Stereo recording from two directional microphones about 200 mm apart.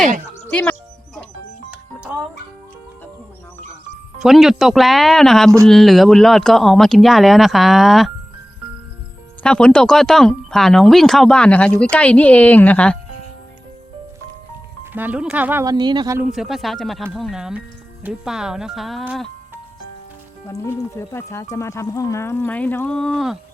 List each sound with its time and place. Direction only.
0.5 s music: 5° left (ahead or behind)
1.7 s music: 5° right (ahead or behind)
4.2 s speech: centre (ahead or behind)
9.4 s speech: 5° left (ahead or behind)
14.9 s speech: 10° right (ahead or behind)
15.6 s speech: 20° right (ahead or behind)
16.2 s speech: centre (ahead or behind)
20.5 s speech: 15° left (ahead or behind)